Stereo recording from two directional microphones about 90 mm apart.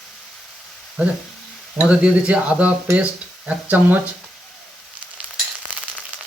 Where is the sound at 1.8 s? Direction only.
10° right (ahead or behind).